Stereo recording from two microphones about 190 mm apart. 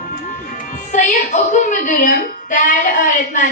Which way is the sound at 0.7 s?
45° left (ahead or behind).